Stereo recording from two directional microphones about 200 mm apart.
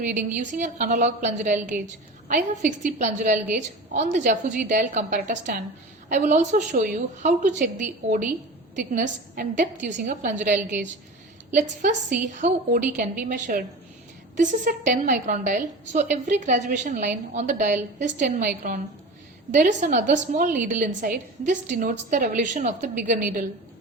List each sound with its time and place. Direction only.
0.0 s a woman's voice: 40° right (ahead or behind)